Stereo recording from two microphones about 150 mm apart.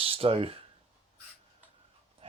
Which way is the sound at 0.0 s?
40° right (ahead or behind).